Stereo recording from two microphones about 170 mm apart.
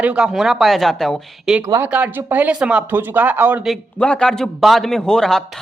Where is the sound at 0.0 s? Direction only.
5° right (ahead or behind).